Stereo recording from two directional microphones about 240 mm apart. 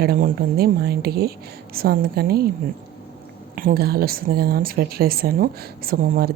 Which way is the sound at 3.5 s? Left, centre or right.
Right.